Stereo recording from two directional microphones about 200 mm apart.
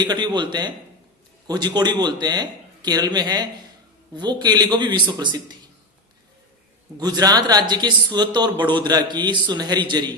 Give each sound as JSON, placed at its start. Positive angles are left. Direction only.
{"t": 0.0, "sound": "speech", "side_deg": -20}
{"t": 7.0, "sound": "speech", "side_deg": -20}